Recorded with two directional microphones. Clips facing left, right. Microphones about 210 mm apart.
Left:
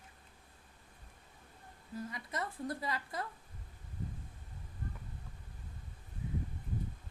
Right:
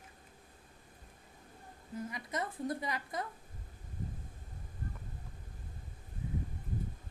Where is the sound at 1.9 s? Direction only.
20° right (ahead or behind).